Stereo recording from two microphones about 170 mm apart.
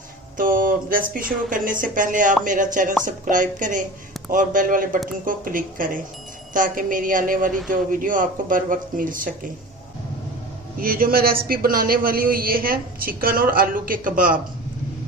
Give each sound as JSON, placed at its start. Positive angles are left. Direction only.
{"t": 0.3, "sound": "speech", "side_deg": -55}
{"t": 10.8, "sound": "a man's voice", "side_deg": -60}